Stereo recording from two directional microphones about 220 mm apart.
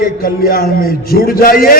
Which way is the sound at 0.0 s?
40° left (ahead or behind).